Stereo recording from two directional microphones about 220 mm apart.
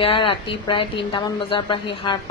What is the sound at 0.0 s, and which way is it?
A woman's voice, 25° left (ahead or behind).